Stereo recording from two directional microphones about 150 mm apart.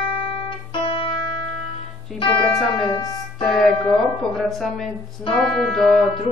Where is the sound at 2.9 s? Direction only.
25° left (ahead or behind).